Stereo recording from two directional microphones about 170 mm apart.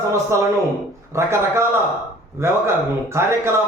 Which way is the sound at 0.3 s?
15° right (ahead or behind).